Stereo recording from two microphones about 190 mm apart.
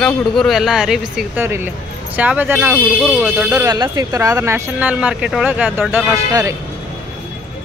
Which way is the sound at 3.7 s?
20° right (ahead or behind).